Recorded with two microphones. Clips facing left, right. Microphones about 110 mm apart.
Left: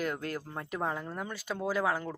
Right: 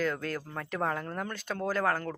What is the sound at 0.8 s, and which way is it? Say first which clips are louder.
Speech: right 3 dB; 5° left (ahead or behind).